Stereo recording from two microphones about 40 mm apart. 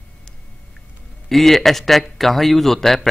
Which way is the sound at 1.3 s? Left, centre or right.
Centre.